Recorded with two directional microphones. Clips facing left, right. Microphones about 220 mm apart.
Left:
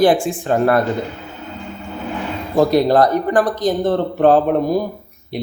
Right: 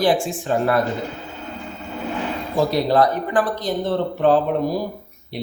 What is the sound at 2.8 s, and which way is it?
Speech, 45° left (ahead or behind).